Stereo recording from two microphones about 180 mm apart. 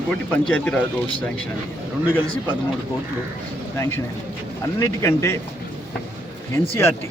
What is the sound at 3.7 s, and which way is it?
A man's voice, 15° left (ahead or behind).